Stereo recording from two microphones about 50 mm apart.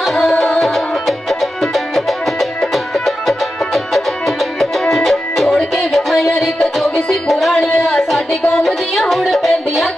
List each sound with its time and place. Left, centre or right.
0.0 s music: centre
7.2 s music: centre
7.5 s a sound: centre
9.1 s music: centre